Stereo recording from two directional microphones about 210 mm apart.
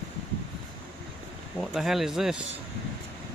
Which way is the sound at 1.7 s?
Centre (ahead or behind).